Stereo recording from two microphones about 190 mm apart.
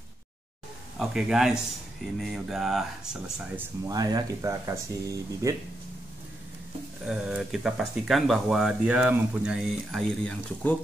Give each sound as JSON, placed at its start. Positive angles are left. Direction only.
{"t": 0.9, "sound": "speech", "side_deg": 0}
{"t": 3.8, "sound": "speech", "side_deg": -20}
{"t": 7.1, "sound": "speech", "side_deg": -5}